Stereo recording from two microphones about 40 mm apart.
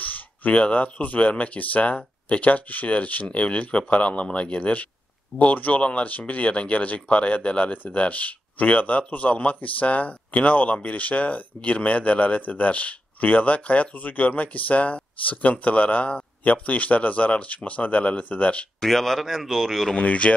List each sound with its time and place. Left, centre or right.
0.0 s a sound: left
0.6 s speech: left
18.8 s a man's voice: centre
20.0 s speech: left